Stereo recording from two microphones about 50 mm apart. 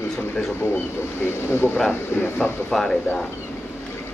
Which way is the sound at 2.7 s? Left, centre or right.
Centre.